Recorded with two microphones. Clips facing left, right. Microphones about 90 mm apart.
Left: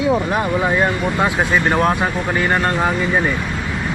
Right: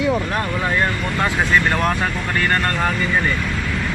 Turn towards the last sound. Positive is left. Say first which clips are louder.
# left 2 dB
turn(degrees=15)  # may be behind; listen again after turning